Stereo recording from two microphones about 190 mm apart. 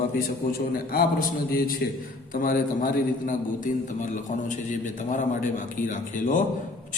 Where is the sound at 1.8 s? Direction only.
55° left (ahead or behind).